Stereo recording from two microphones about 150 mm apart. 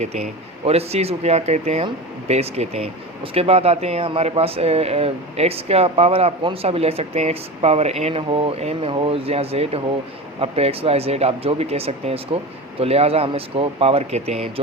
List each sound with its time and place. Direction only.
0.0 s speech: 45° right (ahead or behind)